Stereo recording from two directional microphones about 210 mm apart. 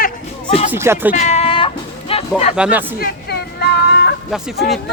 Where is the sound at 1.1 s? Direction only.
35° left (ahead or behind).